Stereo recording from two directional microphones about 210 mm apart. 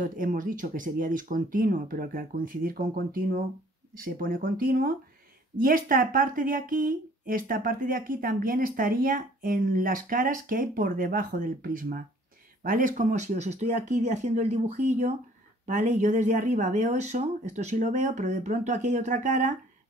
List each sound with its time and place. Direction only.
0.0 s speech: 40° right (ahead or behind)